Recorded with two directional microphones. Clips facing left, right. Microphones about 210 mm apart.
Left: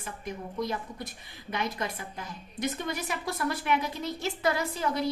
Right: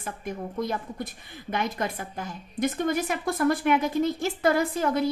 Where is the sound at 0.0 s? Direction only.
50° right (ahead or behind).